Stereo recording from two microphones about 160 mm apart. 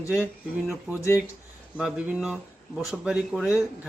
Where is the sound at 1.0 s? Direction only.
15° left (ahead or behind).